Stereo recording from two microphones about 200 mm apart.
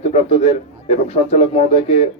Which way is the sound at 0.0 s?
30° left (ahead or behind).